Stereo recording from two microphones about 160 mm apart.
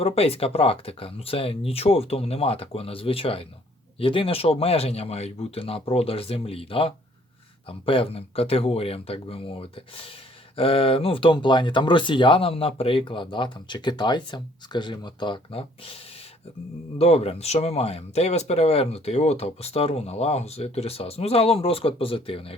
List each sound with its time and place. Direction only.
0.0 s speech: 40° left (ahead or behind)
17.0 s speech: 40° left (ahead or behind)